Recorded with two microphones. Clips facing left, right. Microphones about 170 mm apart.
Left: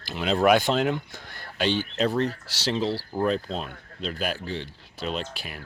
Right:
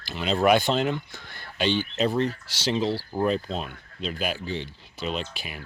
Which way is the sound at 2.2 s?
35° left (ahead or behind).